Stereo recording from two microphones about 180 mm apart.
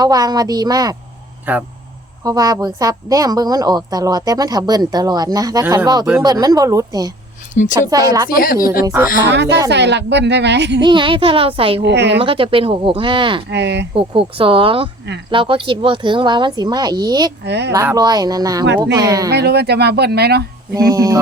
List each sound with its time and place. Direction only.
0.0 s a woman's voice: 20° right (ahead or behind)
1.5 s speech: 10° right (ahead or behind)
2.2 s a woman's voice: 20° right (ahead or behind)
9.3 s a child's voice: 70° right (ahead or behind)
10.8 s a woman's voice: 25° right (ahead or behind)
11.8 s a child's voice: 70° right (ahead or behind)
12.2 s a woman's voice: 30° right (ahead or behind)
13.5 s a child's voice: 75° right (ahead or behind)
13.9 s a woman's voice: 30° right (ahead or behind)
17.4 s a child's voice: 70° right (ahead or behind)
17.7 s a woman's voice: 15° right (ahead or behind)
19.3 s speech: 65° right (ahead or behind)
20.9 s a woman's voice: 20° right (ahead or behind)